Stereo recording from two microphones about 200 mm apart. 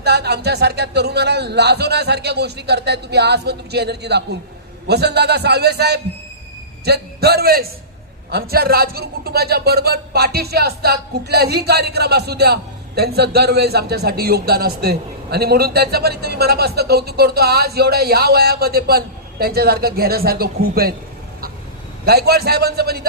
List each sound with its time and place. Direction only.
0.0 s speech: 55° right (ahead or behind)
22.0 s speech: 50° right (ahead or behind)